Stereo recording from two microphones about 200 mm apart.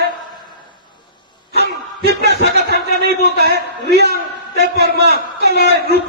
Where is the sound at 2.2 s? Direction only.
55° right (ahead or behind).